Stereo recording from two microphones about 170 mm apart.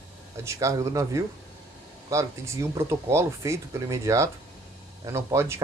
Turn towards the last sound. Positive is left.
turn(degrees=-15)  # may be behind; listen again after turning